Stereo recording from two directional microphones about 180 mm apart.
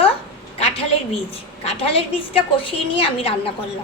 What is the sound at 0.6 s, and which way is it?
A woman's voice, 35° left (ahead or behind).